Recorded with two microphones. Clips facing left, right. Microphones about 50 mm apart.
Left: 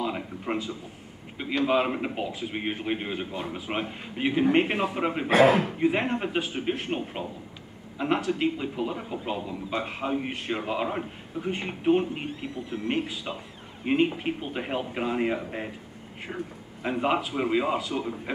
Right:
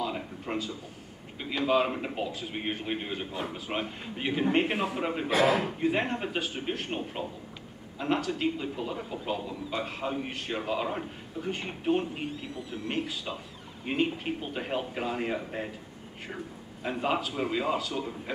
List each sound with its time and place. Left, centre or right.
0.0 s a sound: centre
1.6 s a man's voice: centre
5.3 s speech: left
5.9 s a man's voice: centre